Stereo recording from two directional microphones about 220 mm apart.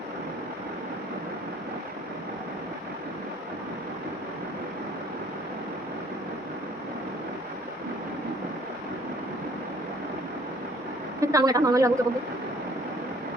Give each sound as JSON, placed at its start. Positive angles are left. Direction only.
{"t": 11.2, "sound": "a woman's voice", "side_deg": -15}